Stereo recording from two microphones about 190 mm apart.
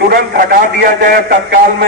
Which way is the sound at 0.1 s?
50° right (ahead or behind).